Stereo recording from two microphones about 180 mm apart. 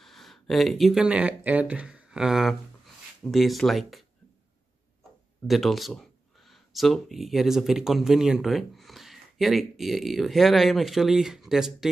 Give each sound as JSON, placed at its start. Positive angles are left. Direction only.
{"t": 0.0, "sound": "speech", "side_deg": 0}
{"t": 5.5, "sound": "speech", "side_deg": 0}